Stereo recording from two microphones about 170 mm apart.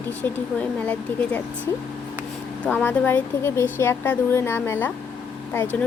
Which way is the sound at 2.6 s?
10° left (ahead or behind).